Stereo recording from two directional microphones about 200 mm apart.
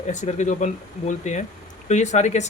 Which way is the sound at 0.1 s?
35° left (ahead or behind).